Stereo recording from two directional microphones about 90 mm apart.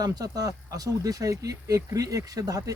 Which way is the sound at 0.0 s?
45° right (ahead or behind).